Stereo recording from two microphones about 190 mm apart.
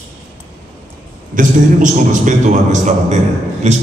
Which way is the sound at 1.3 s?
45° right (ahead or behind).